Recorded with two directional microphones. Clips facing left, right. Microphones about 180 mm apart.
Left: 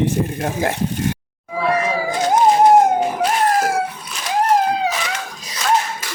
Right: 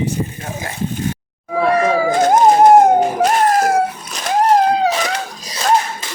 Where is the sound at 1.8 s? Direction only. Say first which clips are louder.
Right 6 dB; 50° right (ahead or behind).